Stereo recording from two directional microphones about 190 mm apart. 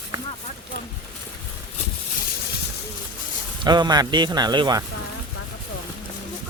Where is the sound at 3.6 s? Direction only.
20° right (ahead or behind).